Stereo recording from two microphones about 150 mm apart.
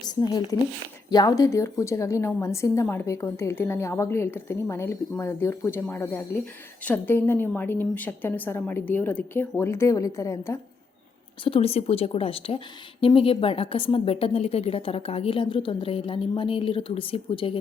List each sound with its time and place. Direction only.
0.0 s a woman's voice: 25° left (ahead or behind)
11.4 s a woman's voice: 40° left (ahead or behind)